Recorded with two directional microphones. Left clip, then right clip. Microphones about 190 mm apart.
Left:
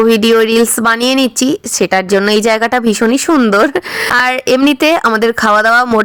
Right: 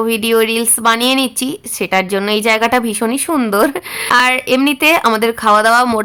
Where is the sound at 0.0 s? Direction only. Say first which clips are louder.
Left 5 dB; 25° left (ahead or behind).